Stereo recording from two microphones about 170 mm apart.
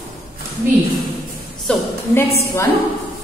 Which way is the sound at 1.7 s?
5° left (ahead or behind).